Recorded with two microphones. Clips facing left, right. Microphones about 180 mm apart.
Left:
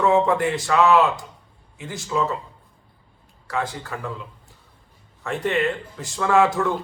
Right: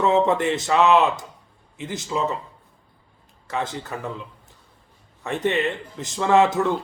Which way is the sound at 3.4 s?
20° right (ahead or behind).